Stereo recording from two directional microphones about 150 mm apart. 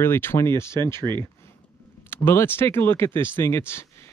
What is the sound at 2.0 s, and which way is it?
Speech, 15° left (ahead or behind).